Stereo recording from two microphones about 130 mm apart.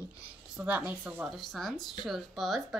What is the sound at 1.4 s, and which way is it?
Speech, centre (ahead or behind).